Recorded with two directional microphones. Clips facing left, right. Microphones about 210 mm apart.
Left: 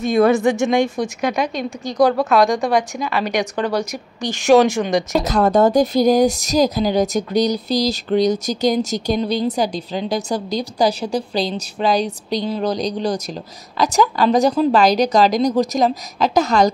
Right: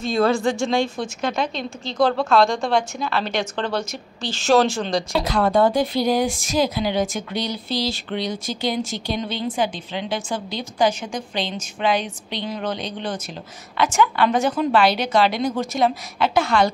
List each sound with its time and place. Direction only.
0.0 s a woman's voice: 20° left (ahead or behind)
5.1 s speech: 40° left (ahead or behind)